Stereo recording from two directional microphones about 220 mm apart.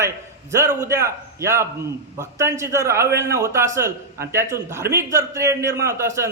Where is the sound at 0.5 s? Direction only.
15° right (ahead or behind).